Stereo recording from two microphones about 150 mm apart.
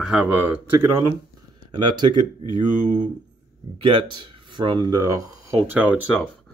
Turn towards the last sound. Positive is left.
turn(degrees=-10)  # may be behind; listen again after turning